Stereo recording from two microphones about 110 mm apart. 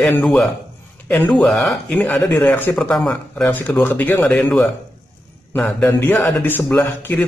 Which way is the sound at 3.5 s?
15° left (ahead or behind).